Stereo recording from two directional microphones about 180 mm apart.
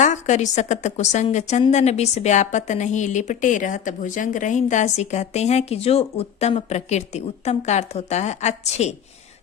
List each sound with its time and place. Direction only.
0.0 s a woman's voice: 40° left (ahead or behind)